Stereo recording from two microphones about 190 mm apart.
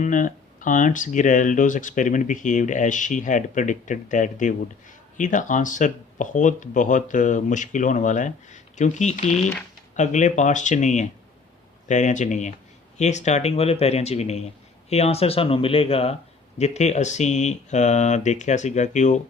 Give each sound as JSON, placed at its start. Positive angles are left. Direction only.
{"t": 0.0, "sound": "speech", "side_deg": 45}